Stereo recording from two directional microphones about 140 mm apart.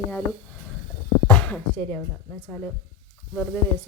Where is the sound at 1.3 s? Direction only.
10° left (ahead or behind).